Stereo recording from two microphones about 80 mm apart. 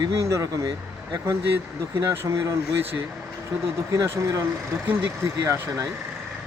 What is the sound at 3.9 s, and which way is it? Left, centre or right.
Speech, right.